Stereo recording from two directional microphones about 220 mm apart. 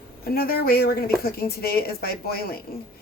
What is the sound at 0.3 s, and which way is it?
Speech, 45° left (ahead or behind).